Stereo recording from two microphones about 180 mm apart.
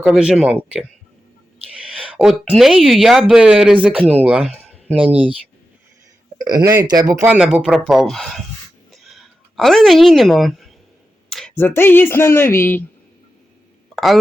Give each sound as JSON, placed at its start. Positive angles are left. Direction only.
{"t": 0.0, "sound": "speech", "side_deg": -5}
{"t": 2.0, "sound": "speech", "side_deg": -5}
{"t": 6.4, "sound": "speech", "side_deg": -20}
{"t": 7.3, "sound": "speech", "side_deg": -5}
{"t": 8.9, "sound": "a sound", "side_deg": 0}
{"t": 11.3, "sound": "speech", "side_deg": 5}
{"t": 13.9, "sound": "a sound", "side_deg": 0}